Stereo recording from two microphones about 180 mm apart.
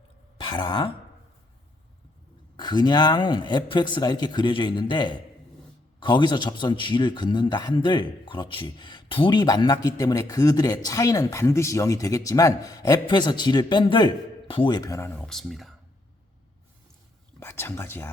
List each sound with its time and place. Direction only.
0.3 s throat clearing: 25° left (ahead or behind)
2.6 s a man's voice: 25° left (ahead or behind); by 15.7 s centre (ahead or behind)
17.4 s speech: 10° left (ahead or behind)